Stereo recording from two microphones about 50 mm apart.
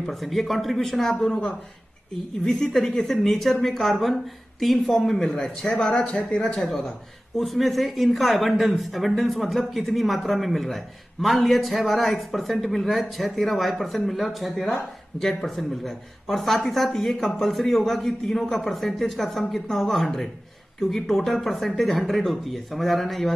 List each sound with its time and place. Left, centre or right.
0.0 s speech: centre
7.3 s speech: centre